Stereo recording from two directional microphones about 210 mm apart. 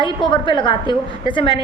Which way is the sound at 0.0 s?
20° left (ahead or behind).